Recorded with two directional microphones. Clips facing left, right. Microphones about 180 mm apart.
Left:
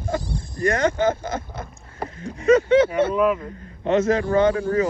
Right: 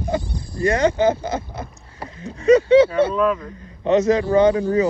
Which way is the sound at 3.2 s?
20° left (ahead or behind).